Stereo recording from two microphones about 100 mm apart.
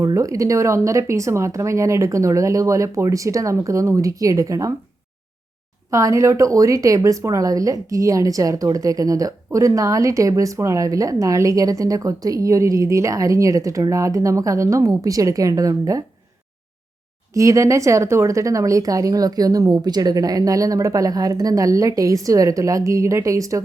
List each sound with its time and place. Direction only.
0.0 s a woman's voice: 35° right (ahead or behind)
5.9 s a woman's voice: 30° right (ahead or behind)
17.3 s a woman's voice: 30° right (ahead or behind)